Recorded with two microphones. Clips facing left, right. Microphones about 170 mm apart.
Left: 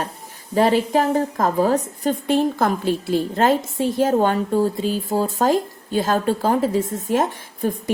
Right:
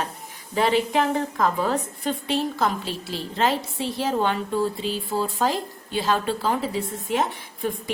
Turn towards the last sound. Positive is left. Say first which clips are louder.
# left 5 dB
turn(degrees=45)  # may be behind; listen again after turning